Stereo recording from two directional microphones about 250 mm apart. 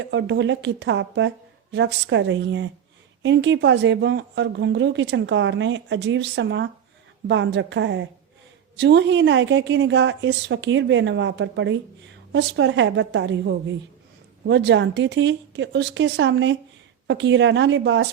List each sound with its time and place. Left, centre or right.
0.0 s speech: right